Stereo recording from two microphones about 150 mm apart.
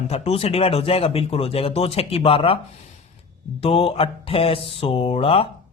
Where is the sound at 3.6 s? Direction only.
40° left (ahead or behind).